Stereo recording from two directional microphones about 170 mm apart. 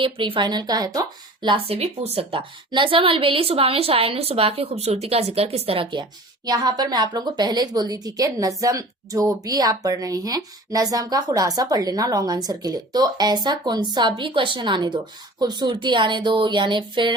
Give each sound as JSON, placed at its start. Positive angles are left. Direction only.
{"t": 0.0, "sound": "a woman's voice", "side_deg": -30}